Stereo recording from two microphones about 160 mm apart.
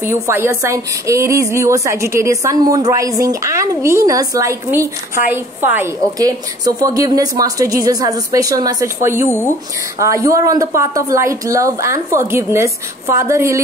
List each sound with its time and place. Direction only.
0.0 s speech: 15° right (ahead or behind)